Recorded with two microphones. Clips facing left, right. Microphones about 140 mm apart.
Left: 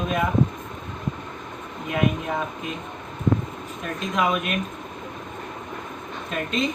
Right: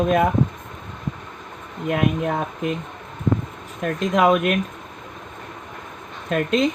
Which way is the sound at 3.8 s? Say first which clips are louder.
Right 6 dB; 70° right (ahead or behind).